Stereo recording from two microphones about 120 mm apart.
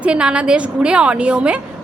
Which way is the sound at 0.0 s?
10° right (ahead or behind).